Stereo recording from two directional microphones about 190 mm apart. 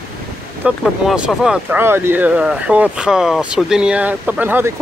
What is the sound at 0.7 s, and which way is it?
Speech, 5° right (ahead or behind).